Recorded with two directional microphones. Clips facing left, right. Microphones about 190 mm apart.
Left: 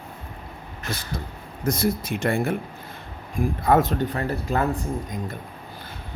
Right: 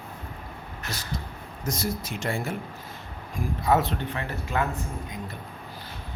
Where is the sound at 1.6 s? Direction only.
55° left (ahead or behind).